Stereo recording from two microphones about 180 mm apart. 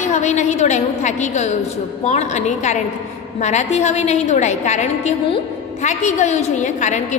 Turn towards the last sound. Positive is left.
turn(degrees=40)  # may be behind; listen again after turning